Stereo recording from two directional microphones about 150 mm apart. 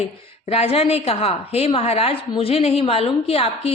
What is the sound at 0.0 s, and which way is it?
A woman's voice, 45° left (ahead or behind).